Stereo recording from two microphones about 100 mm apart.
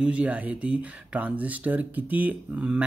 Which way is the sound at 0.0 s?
15° right (ahead or behind).